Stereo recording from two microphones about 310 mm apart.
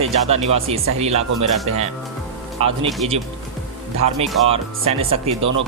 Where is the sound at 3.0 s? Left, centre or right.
Centre.